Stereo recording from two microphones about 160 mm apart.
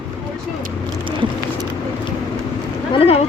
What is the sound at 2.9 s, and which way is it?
Boat, 35° left (ahead or behind).